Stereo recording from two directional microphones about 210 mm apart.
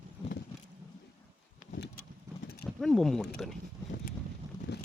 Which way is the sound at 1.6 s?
50° left (ahead or behind).